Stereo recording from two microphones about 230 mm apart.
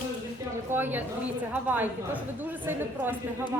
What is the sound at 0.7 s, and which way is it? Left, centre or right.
A woman's voice, centre.